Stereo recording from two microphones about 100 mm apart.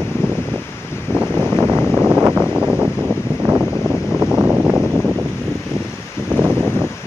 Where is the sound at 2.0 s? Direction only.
20° right (ahead or behind).